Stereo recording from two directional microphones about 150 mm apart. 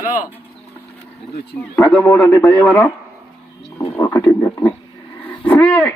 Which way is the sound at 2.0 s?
15° left (ahead or behind).